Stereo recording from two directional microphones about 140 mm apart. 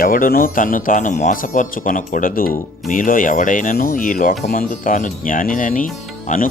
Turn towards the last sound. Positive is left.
turn(degrees=75)  # may be behind; listen again after turning